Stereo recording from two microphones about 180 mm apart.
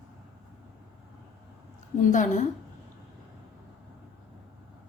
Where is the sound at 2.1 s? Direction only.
45° left (ahead or behind).